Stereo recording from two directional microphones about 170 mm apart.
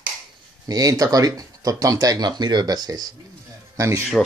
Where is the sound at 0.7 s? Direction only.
20° right (ahead or behind).